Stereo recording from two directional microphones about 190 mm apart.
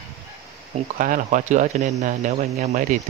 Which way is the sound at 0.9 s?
45° right (ahead or behind).